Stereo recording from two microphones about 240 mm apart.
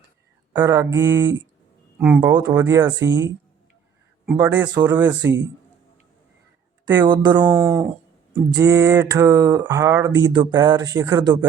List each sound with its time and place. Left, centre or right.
0.5 s speech: centre
4.4 s speech: centre
5.2 s a man's voice: right
6.8 s speech: centre